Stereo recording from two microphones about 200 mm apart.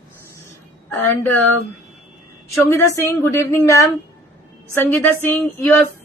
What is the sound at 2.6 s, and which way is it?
A woman's voice, 15° left (ahead or behind).